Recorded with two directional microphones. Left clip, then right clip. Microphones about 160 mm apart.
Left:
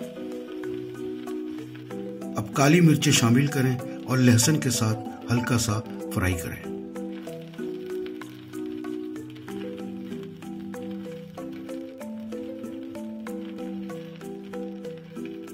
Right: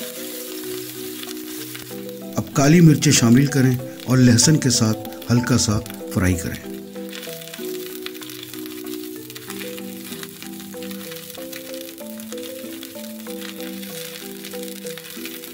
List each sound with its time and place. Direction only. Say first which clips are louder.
2.3 s speech: right 4 dB; 50° right (ahead or behind)